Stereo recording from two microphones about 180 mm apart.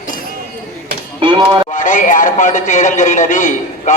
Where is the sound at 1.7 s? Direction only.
45° left (ahead or behind).